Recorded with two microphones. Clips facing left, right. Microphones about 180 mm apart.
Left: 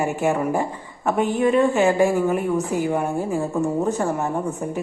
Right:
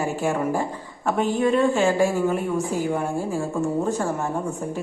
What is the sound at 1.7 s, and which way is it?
A woman's voice, 15° left (ahead or behind).